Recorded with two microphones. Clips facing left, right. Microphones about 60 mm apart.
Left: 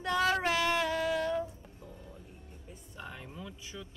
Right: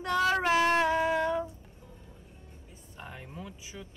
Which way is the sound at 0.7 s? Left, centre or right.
Right.